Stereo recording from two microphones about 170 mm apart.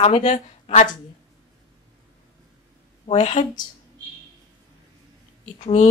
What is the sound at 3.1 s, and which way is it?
Speech, 40° left (ahead or behind).